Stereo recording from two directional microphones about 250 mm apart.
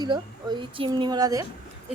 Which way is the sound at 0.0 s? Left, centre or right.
Centre.